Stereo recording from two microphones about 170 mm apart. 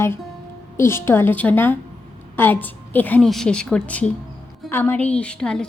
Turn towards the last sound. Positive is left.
turn(degrees=5)  # may be behind; listen again after turning